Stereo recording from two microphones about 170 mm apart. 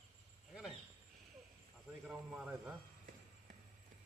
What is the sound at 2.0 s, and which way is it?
Speech, 10° right (ahead or behind).